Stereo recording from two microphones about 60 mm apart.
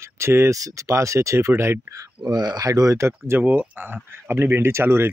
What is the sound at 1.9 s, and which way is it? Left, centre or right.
Speech, right.